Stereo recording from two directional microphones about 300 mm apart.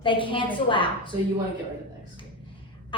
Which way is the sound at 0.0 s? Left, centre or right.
Centre.